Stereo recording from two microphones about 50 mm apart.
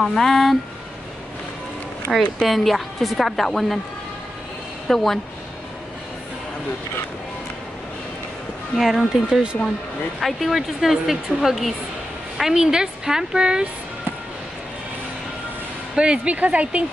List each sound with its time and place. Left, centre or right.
0.0 s speech: centre
2.1 s a woman's voice: centre
4.8 s a woman's voice: centre
8.7 s speech: centre
9.3 s a woman's voice: centre
10.2 s a woman's voice: centre
15.9 s a woman's voice: centre